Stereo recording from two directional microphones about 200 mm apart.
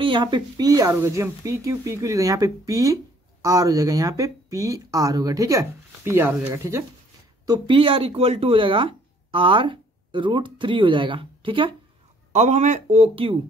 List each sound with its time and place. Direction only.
0.0 s speech: 25° right (ahead or behind)
12.3 s speech: 35° right (ahead or behind)